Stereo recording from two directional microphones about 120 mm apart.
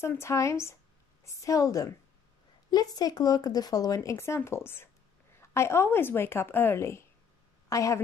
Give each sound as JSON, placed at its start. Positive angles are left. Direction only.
{"t": 0.0, "sound": "a woman's voice", "side_deg": 25}